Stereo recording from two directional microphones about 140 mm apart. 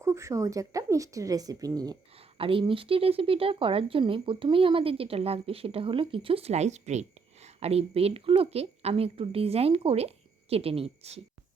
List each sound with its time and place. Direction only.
0.0 s speech: 20° right (ahead or behind)
2.1 s a woman's voice: 40° right (ahead or behind)